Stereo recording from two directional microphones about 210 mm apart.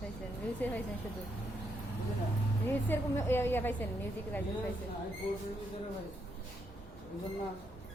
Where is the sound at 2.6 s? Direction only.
10° left (ahead or behind).